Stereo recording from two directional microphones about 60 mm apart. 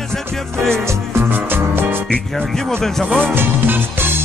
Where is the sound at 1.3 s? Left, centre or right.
Right.